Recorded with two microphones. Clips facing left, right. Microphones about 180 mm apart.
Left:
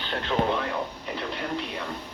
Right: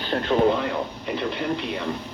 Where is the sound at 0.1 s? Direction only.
30° right (ahead or behind).